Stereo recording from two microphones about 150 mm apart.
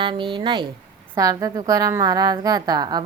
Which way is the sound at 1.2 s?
25° right (ahead or behind).